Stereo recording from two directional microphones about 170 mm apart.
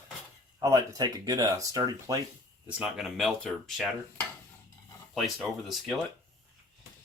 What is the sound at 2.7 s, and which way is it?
Speech, 5° right (ahead or behind).